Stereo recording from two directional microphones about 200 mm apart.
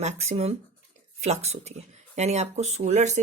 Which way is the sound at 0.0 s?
35° right (ahead or behind).